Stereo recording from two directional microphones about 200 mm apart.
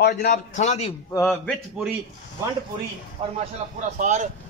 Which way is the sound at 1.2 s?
Centre (ahead or behind).